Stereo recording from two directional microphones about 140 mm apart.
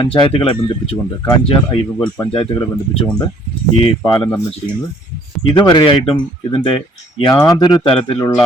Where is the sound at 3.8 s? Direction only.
30° left (ahead or behind).